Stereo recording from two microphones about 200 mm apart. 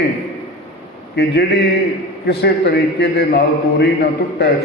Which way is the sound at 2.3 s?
55° left (ahead or behind).